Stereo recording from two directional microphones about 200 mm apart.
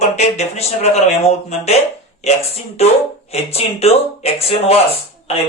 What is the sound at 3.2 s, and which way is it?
Speech, 30° left (ahead or behind).